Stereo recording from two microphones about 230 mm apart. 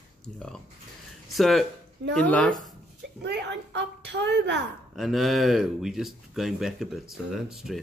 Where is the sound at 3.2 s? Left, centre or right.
Right.